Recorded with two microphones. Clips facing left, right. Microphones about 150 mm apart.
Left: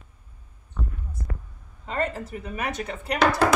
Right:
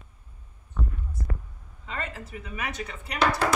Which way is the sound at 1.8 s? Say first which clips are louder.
Left 8 dB; 45° left (ahead or behind).